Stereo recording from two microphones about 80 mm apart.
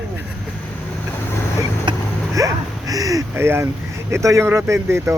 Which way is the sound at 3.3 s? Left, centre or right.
Right.